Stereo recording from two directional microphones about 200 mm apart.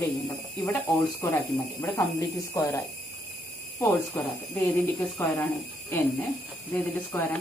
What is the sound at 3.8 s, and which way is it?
Speech, 10° left (ahead or behind).